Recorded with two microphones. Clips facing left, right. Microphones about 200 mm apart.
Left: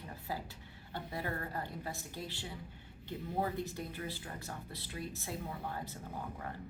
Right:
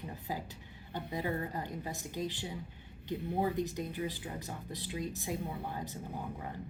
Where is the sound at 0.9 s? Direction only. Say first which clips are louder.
Right 4 dB; 15° right (ahead or behind).